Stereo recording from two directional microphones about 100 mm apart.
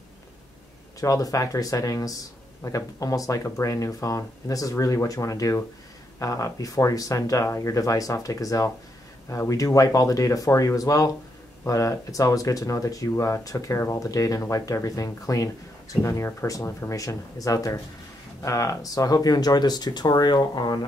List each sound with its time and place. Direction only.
1.0 s speech: 35° left (ahead or behind)